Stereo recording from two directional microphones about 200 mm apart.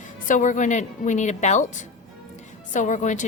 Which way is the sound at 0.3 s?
40° left (ahead or behind).